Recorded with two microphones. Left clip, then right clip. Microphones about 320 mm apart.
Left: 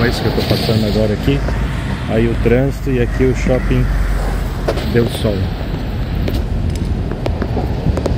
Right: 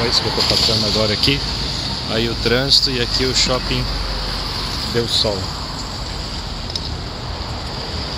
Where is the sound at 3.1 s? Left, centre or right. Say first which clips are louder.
Even; centre.